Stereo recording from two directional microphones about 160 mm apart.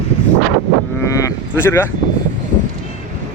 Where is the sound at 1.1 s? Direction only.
20° left (ahead or behind).